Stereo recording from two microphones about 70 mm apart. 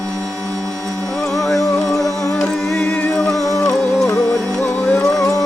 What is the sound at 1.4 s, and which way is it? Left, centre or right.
Music, centre.